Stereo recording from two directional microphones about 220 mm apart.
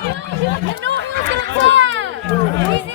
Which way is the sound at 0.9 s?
55° right (ahead or behind).